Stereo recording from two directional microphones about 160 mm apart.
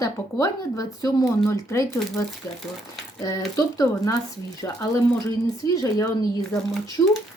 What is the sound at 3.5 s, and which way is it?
Speech, 20° left (ahead or behind).